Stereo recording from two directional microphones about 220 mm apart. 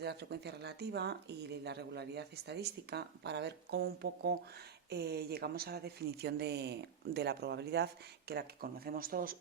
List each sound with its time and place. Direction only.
0.0 s speech: 50° right (ahead or behind)